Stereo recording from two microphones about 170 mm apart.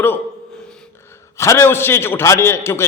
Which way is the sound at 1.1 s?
15° left (ahead or behind).